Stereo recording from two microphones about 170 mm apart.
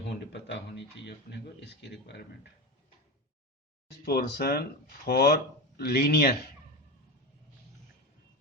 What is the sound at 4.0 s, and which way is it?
Speech, 70° left (ahead or behind).